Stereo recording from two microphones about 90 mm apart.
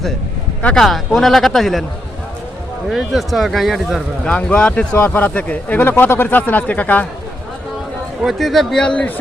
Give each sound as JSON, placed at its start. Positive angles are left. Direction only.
{"t": 0.8, "sound": "speech", "side_deg": 0}
{"t": 2.9, "sound": "speech", "side_deg": 0}
{"t": 4.3, "sound": "speech", "side_deg": 15}
{"t": 8.2, "sound": "speech", "side_deg": 0}